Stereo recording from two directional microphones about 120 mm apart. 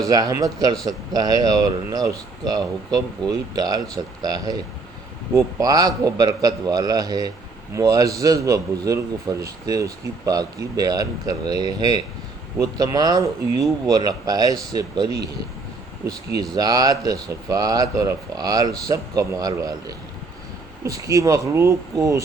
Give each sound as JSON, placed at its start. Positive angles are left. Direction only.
{"t": 0.1, "sound": "a man's voice", "side_deg": -30}